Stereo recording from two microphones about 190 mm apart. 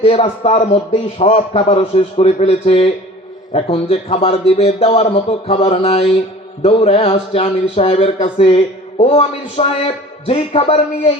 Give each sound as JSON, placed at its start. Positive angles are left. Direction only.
{"t": 0.0, "sound": "speech", "side_deg": 30}